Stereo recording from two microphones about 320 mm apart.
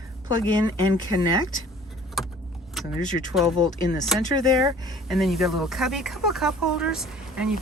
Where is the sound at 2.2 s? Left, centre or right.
Centre.